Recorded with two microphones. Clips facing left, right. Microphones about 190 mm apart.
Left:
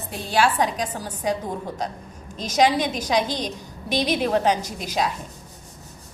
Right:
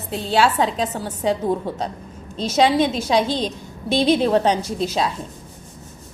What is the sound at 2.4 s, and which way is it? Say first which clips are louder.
A woman's voice: right 3 dB; 25° right (ahead or behind).